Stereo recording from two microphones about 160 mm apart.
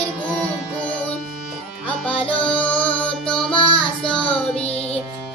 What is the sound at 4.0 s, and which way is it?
Child singing, 5° left (ahead or behind).